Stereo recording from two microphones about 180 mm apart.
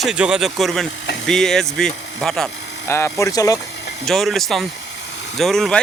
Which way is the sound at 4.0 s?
Centre (ahead or behind).